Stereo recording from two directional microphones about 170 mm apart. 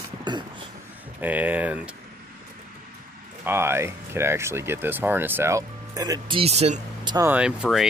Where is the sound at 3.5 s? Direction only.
15° right (ahead or behind); by 6.8 s 40° right (ahead or behind).